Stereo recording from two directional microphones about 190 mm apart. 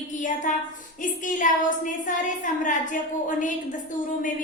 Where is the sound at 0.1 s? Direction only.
40° left (ahead or behind).